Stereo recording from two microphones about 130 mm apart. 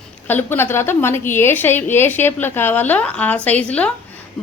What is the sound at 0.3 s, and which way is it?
A woman's voice, 15° left (ahead or behind).